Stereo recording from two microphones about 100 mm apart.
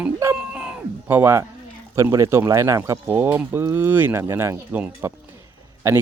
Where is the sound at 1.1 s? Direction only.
25° right (ahead or behind).